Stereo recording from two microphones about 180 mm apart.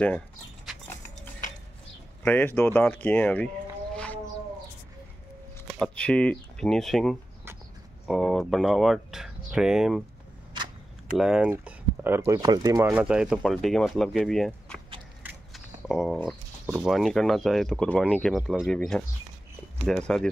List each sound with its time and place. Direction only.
2.2 s speech: 10° left (ahead or behind)
5.7 s speech: 5° left (ahead or behind)
11.1 s speech: 5° right (ahead or behind)
13.0 s speech: 5° right (ahead or behind)
15.2 s a sound: centre (ahead or behind)
16.6 s speech: 5° right (ahead or behind)
19.9 s speech: 5° left (ahead or behind)